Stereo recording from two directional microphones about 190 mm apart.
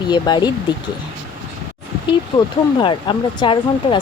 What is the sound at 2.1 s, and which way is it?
Speech, 25° left (ahead or behind).